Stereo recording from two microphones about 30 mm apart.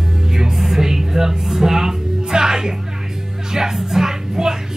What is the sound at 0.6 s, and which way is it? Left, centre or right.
Music, centre.